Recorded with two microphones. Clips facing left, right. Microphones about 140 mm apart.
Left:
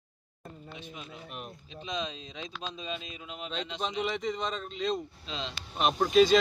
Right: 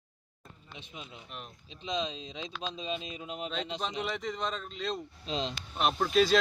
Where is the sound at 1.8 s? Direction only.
20° right (ahead or behind); by 3.5 s 40° right (ahead or behind).